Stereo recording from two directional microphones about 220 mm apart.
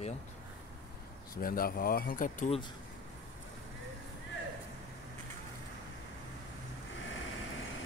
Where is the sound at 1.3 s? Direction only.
40° left (ahead or behind).